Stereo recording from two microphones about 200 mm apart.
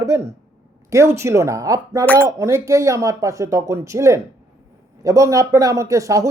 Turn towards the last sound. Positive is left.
turn(degrees=-15)  # may be behind; listen again after turning